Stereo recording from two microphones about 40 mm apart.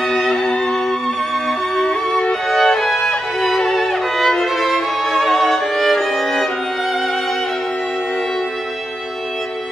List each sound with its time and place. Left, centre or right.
0.1 s music: centre
1.8 s music: left; by 6.5 s centre